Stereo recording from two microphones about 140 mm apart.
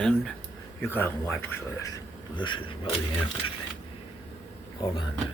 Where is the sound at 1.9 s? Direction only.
35° left (ahead or behind).